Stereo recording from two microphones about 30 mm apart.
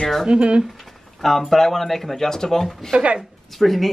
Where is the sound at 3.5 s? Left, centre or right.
Centre.